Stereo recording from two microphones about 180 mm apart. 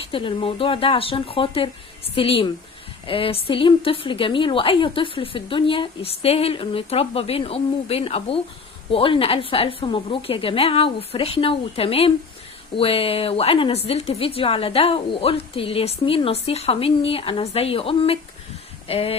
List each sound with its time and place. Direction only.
0.0 s speech: 30° left (ahead or behind)